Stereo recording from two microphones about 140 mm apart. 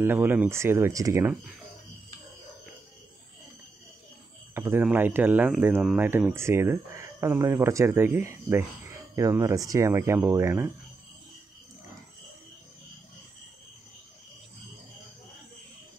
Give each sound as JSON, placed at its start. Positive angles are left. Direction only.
{"t": 0.0, "sound": "speech", "side_deg": -15}
{"t": 4.6, "sound": "speech", "side_deg": -15}